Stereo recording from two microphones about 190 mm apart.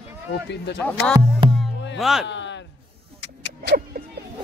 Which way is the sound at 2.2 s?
70° left (ahead or behind).